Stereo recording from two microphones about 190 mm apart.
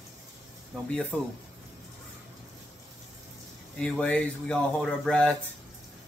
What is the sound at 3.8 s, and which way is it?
Speech, 5° left (ahead or behind).